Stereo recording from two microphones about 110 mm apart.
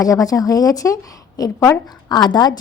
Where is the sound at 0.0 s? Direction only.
30° left (ahead or behind).